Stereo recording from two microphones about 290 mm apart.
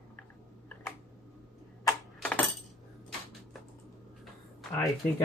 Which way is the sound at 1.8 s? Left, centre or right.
Centre.